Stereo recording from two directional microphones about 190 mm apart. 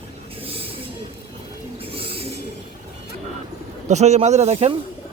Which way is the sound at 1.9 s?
30° right (ahead or behind).